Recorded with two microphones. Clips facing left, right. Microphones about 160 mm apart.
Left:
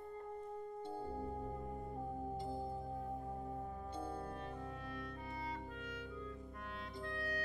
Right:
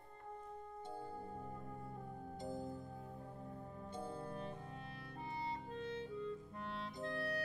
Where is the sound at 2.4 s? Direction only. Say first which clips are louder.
Left 2 dB; 25° left (ahead or behind).